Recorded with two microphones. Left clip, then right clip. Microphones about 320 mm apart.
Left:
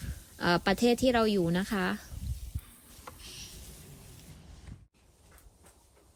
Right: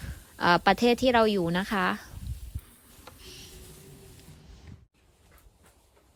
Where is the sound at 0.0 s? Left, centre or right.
Centre.